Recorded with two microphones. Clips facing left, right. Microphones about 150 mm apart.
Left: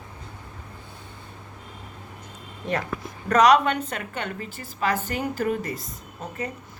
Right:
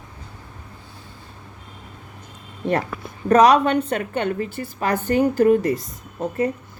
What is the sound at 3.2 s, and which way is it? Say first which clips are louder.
Speech: right 4 dB; 30° right (ahead or behind).